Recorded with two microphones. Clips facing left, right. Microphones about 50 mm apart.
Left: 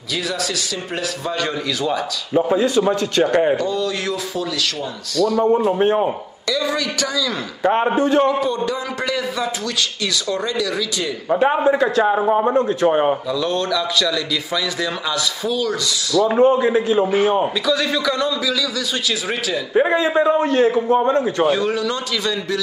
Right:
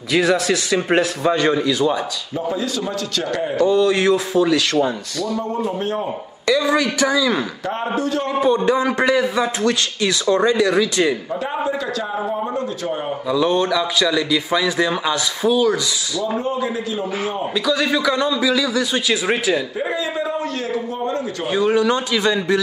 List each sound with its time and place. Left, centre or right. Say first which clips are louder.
0.1 s speech: right 7 dB; right
1.3 s a man's voice: right 5 dB; right
2.5 s a man's voice: left 7 dB; left
3.6 s a man's voice: right 7 dB; right
5.7 s a man's voice: left 6 dB; left
6.4 s a man's voice: right 4 dB; right
7.6 s a man's voice: left 6 dB; left
8.3 s a man's voice: right 3 dB; right
11.2 s a man's voice: left 7 dB; left
13.3 s a man's voice: right 3 dB; centre
16.3 s a man's voice: left 7 dB; left
17.6 s a man's voice: right 1 dB; centre; by 19.6 s right
19.7 s a man's voice: left 7 dB; left
21.5 s a man's voice: right 2 dB; centre